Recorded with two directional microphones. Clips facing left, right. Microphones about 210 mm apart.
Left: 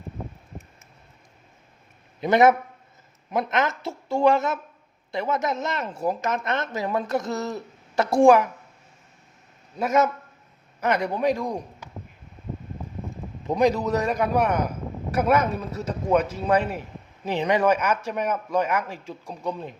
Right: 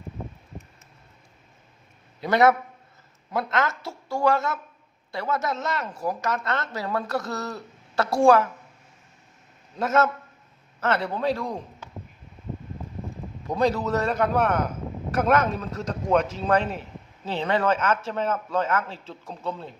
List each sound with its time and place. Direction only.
2.2 s speech: 20° left (ahead or behind)
9.7 s a man's voice: 10° left (ahead or behind)
13.5 s a man's voice: 15° left (ahead or behind)